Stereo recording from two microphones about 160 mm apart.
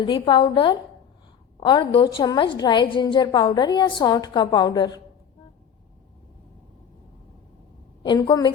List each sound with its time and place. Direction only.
0.0 s a woman's voice: 30° left (ahead or behind)
8.0 s a woman's voice: 25° left (ahead or behind)